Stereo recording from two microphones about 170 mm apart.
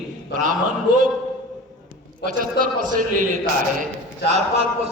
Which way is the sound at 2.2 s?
55° right (ahead or behind).